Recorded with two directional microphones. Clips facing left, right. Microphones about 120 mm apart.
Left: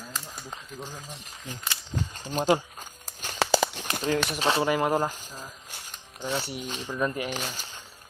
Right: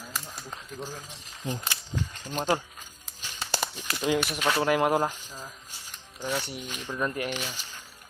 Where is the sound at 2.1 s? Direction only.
35° left (ahead or behind).